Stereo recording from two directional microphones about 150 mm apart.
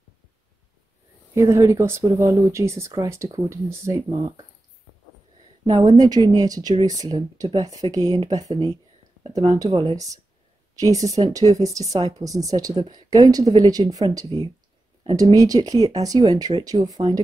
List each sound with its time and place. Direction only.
1.3 s speech: 20° right (ahead or behind)
5.7 s speech: 25° right (ahead or behind)